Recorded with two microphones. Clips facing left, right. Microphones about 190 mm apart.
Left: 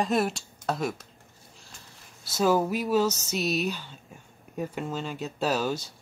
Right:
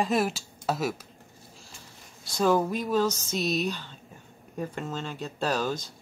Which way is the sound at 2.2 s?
5° left (ahead or behind).